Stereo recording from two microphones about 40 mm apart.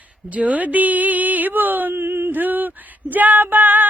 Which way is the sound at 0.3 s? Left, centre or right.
Right.